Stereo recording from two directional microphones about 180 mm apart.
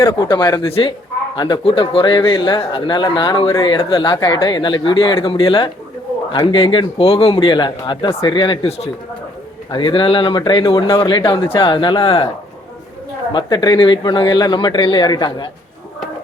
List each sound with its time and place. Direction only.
0.0 s a man's voice: 25° left (ahead or behind)
13.3 s a man's voice: 25° left (ahead or behind)